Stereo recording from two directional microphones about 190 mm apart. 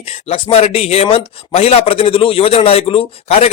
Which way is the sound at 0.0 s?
30° left (ahead or behind).